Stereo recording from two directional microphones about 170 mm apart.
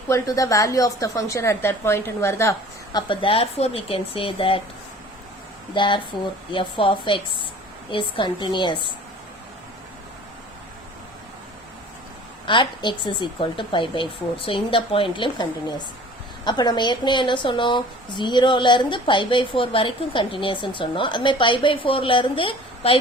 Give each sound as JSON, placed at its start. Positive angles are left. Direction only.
{"t": 0.1, "sound": "a woman's voice", "side_deg": 20}
{"t": 3.1, "sound": "speech", "side_deg": 30}
{"t": 5.7, "sound": "a woman's voice", "side_deg": 30}
{"t": 12.5, "sound": "a woman's voice", "side_deg": 30}